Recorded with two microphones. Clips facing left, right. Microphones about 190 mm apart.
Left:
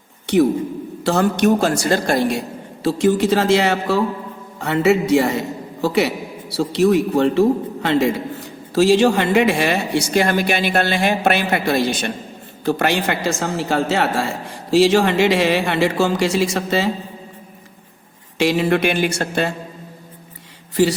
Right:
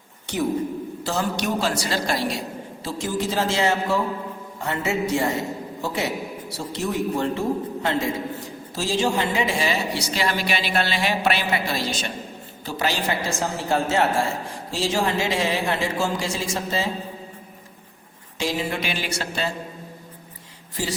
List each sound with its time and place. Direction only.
1.0 s a woman's voice: 60° left (ahead or behind)
2.8 s a man's voice: 65° left (ahead or behind)
18.3 s speech: 65° left (ahead or behind)
20.8 s speech: 65° left (ahead or behind)